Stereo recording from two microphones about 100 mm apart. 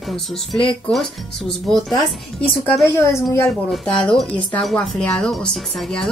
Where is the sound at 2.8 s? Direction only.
30° left (ahead or behind).